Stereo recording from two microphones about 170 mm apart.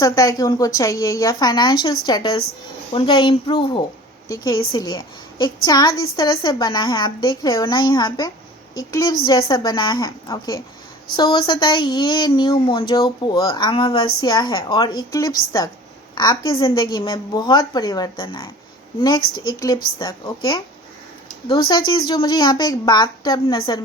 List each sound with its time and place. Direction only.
0.0 s a woman's voice: 20° left (ahead or behind)